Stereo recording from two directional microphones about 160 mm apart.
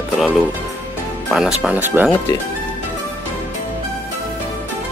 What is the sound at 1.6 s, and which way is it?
Speech, 10° right (ahead or behind).